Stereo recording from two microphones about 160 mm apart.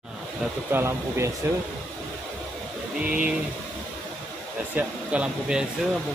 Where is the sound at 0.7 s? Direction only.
15° right (ahead or behind).